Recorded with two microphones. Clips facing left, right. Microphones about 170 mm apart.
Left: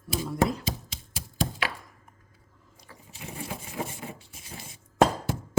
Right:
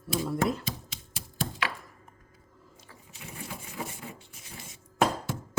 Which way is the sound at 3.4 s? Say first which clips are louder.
Left 4 dB; 90° left.